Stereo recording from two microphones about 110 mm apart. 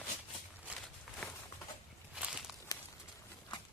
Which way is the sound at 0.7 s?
10° right (ahead or behind).